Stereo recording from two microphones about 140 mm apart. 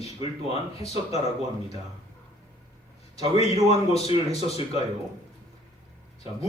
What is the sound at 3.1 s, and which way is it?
A man's voice, 45° left (ahead or behind).